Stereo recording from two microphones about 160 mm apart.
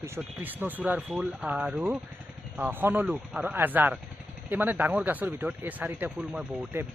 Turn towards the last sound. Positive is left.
turn(degrees=-10)  # may be behind; listen again after turning